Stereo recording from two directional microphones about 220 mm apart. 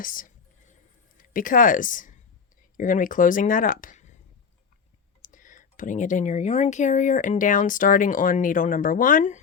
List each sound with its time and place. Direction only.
0.0 s speech: 40° left (ahead or behind)
5.2 s speech: 35° left (ahead or behind)